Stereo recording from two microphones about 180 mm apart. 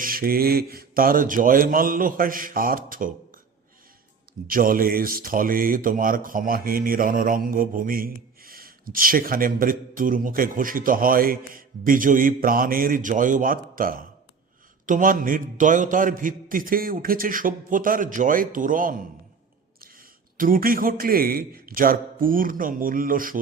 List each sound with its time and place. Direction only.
0.0 s speech: 55° right (ahead or behind)
4.4 s speech: 50° right (ahead or behind)
20.3 s speech: 50° right (ahead or behind)